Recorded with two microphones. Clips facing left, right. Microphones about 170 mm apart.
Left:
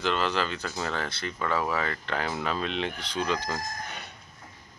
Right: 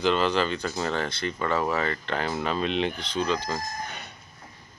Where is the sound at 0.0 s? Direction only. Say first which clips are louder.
Right 4 dB; centre (ahead or behind).